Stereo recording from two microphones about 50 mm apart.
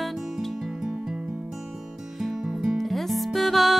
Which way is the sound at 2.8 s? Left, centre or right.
Centre.